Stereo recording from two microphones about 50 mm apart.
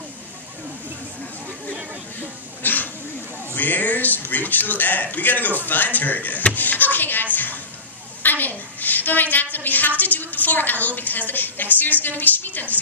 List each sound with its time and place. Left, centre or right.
2.6 s dog: left
3.5 s a woman's voice: left
7.3 s a sound: left
8.2 s a woman's voice: left